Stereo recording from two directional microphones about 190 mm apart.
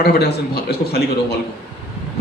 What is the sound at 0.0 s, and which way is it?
A man's voice, 55° left (ahead or behind).